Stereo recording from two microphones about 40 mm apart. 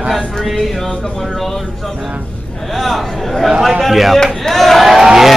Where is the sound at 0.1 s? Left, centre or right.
Centre.